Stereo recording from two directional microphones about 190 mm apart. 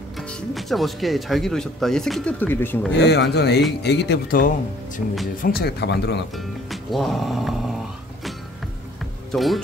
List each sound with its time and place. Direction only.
0.3 s speech: centre (ahead or behind)
2.9 s speech: 65° left (ahead or behind)
6.3 s speech: centre (ahead or behind)
9.3 s speech: centre (ahead or behind)